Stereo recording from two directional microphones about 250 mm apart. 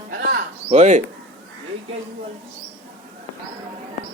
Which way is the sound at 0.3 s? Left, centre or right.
Right.